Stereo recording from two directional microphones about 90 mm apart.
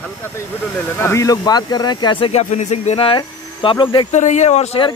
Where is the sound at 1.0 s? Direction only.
35° left (ahead or behind); by 2.2 s 50° left (ahead or behind).